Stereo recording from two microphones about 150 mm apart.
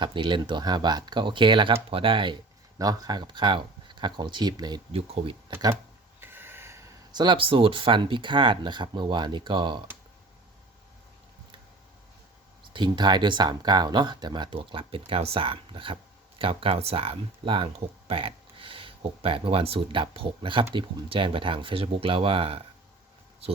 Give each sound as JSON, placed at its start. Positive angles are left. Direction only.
{"t": 0.0, "sound": "speech", "side_deg": -30}
{"t": 4.9, "sound": "speech", "side_deg": -40}
{"t": 6.1, "sound": "a sound", "side_deg": -15}
{"t": 7.3, "sound": "speech", "side_deg": -35}
{"t": 12.7, "sound": "speech", "side_deg": -30}